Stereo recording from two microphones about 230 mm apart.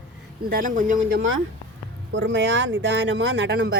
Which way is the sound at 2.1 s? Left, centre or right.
Right.